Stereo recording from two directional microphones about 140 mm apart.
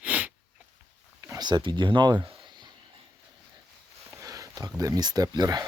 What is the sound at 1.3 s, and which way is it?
Speech, 30° right (ahead or behind).